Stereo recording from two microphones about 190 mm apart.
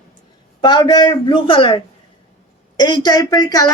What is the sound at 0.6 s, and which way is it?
A woman's voice, 25° left (ahead or behind).